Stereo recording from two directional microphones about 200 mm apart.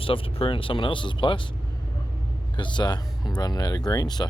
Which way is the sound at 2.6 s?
25° left (ahead or behind).